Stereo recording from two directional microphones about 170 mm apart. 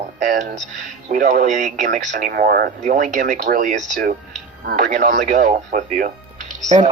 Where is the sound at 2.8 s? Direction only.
50° right (ahead or behind).